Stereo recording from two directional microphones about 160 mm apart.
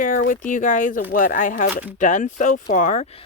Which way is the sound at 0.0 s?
60° left (ahead or behind).